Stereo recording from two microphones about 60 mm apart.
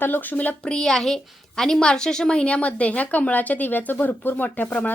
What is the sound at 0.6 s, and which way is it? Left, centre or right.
A woman's voice, centre.